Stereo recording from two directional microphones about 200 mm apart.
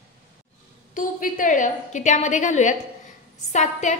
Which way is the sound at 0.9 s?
40° left (ahead or behind).